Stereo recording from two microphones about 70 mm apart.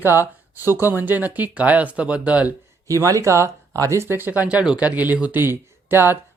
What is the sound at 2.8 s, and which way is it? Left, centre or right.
Speech, right.